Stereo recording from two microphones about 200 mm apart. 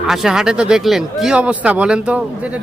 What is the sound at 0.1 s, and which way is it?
Speech, centre (ahead or behind).